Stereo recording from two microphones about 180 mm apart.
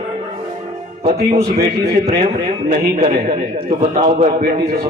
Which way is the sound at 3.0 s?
40° right (ahead or behind).